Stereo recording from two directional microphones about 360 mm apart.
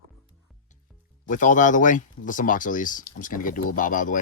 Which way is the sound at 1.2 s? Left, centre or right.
Left.